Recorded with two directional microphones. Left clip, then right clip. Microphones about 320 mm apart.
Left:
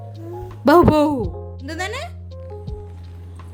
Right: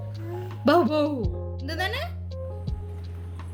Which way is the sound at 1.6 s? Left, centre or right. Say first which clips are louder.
Left 2 dB; centre.